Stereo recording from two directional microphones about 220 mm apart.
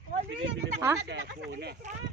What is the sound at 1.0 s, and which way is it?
Speech, 50° right (ahead or behind).